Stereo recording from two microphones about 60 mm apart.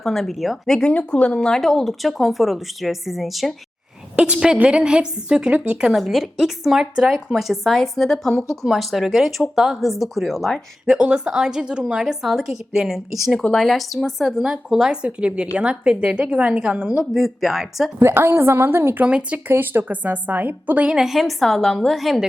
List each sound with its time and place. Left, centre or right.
0.0 s speech: centre
0.7 s speech: centre
4.1 s a woman's voice: centre
5.9 s speech: centre
10.8 s a woman's voice: centre
13.5 s a woman's voice: centre
17.0 s speech: centre
18.0 s a woman's voice: right
18.9 s a woman's voice: right
19.5 s a woman's voice: right
20.9 s speech: centre